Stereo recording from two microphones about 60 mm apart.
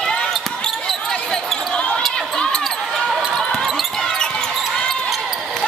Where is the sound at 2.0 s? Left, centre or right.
Centre.